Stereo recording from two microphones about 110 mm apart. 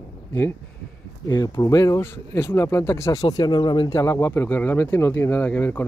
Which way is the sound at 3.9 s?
30° left (ahead or behind).